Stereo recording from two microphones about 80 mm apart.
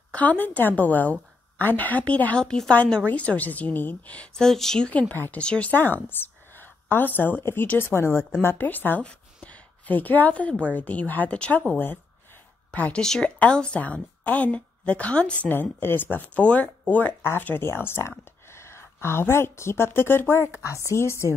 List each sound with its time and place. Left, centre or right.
0.1 s speech: centre
2.4 s a woman's voice: centre
2.7 s a woman's voice: centre
4.5 s a woman's voice: centre
12.7 s a woman's voice: centre
15.4 s a woman's voice: left